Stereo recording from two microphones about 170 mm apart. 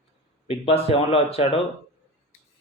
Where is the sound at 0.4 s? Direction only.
35° left (ahead or behind).